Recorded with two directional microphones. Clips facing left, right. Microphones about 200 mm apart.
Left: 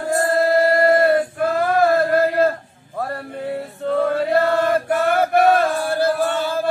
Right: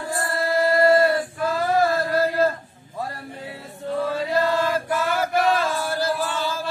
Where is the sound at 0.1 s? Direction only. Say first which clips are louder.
Left 8 dB; 45° left (ahead or behind).